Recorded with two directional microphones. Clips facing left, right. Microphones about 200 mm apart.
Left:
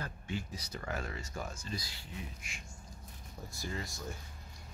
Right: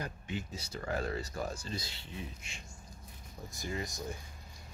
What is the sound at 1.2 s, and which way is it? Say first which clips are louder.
Speech: right 4 dB; 35° right (ahead or behind).